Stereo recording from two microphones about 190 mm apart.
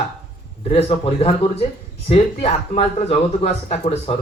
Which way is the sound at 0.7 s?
30° left (ahead or behind).